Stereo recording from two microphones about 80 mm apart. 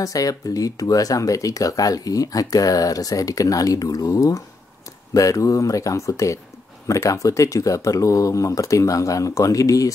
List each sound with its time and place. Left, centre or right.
0.0 s speech: left